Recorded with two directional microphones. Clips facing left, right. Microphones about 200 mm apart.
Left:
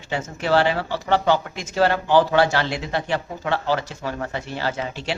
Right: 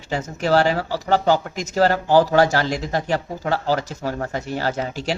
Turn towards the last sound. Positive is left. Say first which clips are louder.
# right 3 dB
turn(degrees=-40)  # may be behind; listen again after turning